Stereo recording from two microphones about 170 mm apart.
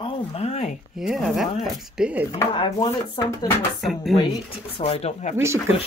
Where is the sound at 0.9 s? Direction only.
Centre (ahead or behind).